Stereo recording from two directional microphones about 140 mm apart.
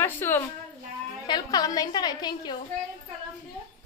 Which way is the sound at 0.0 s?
15° left (ahead or behind).